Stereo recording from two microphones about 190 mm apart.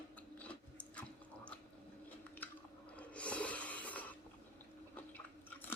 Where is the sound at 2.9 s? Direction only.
5° left (ahead or behind).